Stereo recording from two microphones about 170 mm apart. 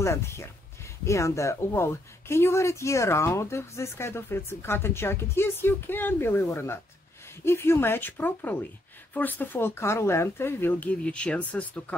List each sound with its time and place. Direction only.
0.0 s speech: 15° left (ahead or behind)